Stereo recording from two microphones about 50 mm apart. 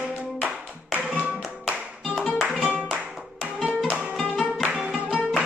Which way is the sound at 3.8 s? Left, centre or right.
Right.